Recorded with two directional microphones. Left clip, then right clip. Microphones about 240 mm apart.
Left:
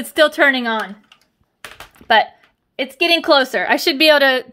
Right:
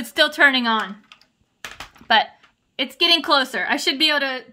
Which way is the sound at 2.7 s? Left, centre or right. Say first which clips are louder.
Left 2 dB; left.